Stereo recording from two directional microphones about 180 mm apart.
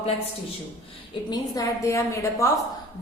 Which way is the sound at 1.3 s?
20° left (ahead or behind).